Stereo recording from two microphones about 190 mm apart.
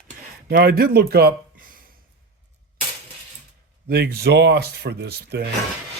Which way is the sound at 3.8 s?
55° right (ahead or behind).